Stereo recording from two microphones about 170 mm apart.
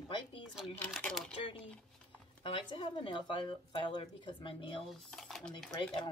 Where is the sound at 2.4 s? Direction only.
30° left (ahead or behind).